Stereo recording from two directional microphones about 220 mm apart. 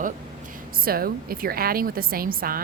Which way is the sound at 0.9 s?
40° right (ahead or behind).